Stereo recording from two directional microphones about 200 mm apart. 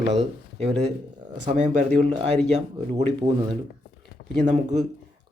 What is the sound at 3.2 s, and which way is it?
Speech, 35° right (ahead or behind).